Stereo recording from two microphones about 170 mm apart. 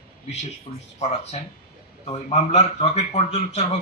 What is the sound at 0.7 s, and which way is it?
Speech, 30° left (ahead or behind).